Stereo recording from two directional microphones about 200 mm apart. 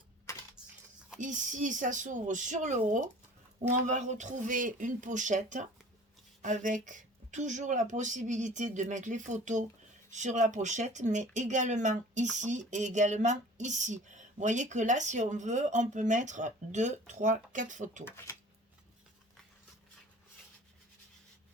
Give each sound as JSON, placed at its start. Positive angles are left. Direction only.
{"t": 0.6, "sound": "cutlery", "side_deg": -5}
{"t": 1.2, "sound": "speech", "side_deg": -40}